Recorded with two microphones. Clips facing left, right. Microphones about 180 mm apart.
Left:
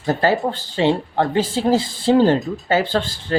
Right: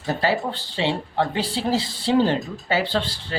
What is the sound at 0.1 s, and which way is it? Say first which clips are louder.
A woman's voice: left 5 dB; 50° left (ahead or behind).